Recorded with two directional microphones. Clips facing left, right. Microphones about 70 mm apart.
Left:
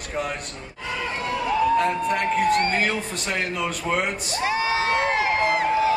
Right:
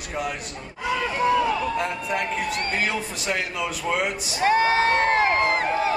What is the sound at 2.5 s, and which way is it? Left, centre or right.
Speech, left.